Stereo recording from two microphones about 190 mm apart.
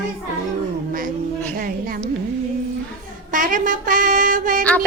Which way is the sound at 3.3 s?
45° right (ahead or behind).